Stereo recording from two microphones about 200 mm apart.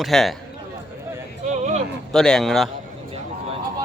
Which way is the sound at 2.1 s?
Centre (ahead or behind).